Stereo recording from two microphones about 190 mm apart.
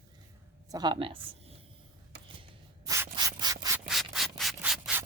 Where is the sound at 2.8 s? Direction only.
15° right (ahead or behind).